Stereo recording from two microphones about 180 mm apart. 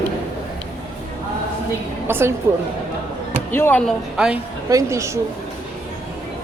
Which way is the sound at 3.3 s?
10° left (ahead or behind).